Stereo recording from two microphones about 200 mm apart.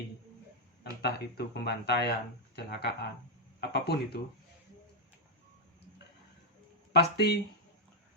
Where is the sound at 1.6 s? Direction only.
55° left (ahead or behind).